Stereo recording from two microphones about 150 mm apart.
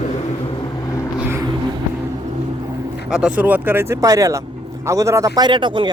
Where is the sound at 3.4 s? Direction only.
10° right (ahead or behind).